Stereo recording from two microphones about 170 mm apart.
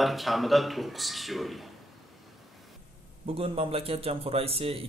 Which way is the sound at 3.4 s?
35° right (ahead or behind).